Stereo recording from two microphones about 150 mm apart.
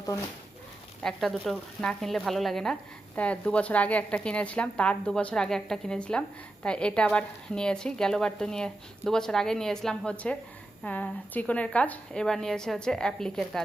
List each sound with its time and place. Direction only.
1.0 s a woman's voice: centre (ahead or behind)